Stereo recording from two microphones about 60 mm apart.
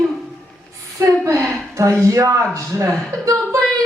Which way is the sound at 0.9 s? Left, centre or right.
Right.